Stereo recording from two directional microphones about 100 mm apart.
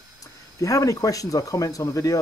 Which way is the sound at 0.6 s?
35° left (ahead or behind).